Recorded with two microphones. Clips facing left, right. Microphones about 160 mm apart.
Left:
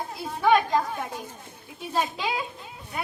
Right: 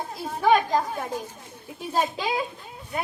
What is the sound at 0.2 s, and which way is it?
Speech, 40° right (ahead or behind).